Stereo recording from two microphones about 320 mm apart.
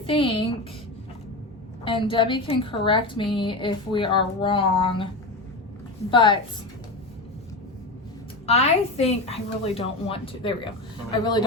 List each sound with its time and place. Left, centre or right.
0.0 s a woman's voice: centre
1.8 s a woman's voice: centre
6.1 s a woman's voice: centre
8.4 s a woman's voice: centre